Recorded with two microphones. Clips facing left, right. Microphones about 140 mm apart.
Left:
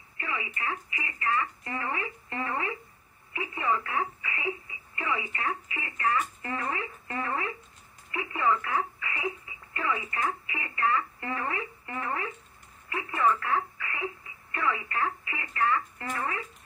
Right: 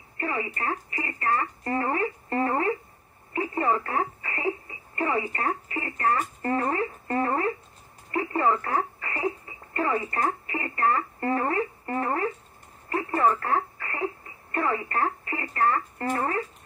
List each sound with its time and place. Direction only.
0.2 s speech: 40° right (ahead or behind)